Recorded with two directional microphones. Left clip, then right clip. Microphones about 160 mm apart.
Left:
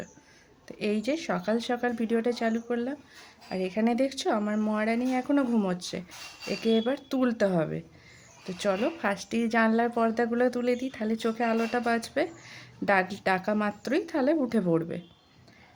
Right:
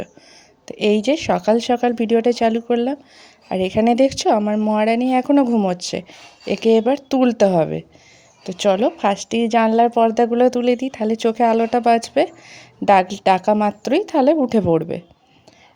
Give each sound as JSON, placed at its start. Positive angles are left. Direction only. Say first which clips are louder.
{"t": 0.6, "sound": "speech", "louder": "right 13 dB", "side_deg": -50}